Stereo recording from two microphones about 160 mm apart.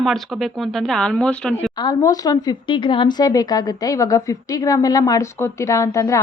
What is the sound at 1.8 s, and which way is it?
Speech, 25° left (ahead or behind).